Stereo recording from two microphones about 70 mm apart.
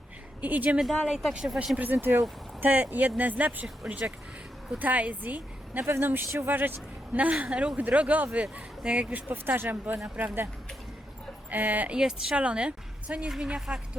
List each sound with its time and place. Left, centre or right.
0.4 s a woman's voice: right
1.0 s a woman's voice: centre
9.3 s a woman's voice: right
11.5 s a woman's voice: right
11.9 s a woman's voice: centre